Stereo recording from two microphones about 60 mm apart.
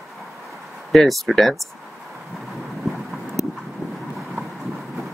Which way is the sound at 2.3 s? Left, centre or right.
Centre.